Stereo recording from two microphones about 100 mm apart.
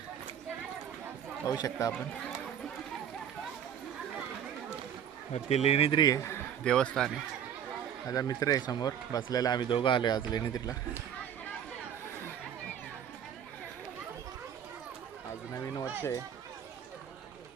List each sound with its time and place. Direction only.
1.5 s speech: 40° left (ahead or behind)
5.3 s speech: 90° left
5.9 s a man's voice: 45° left (ahead or behind)
6.7 s speech: 10° left (ahead or behind)
8.0 s speech: 35° left (ahead or behind)